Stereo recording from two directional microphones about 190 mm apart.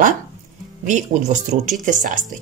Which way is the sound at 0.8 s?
40° right (ahead or behind).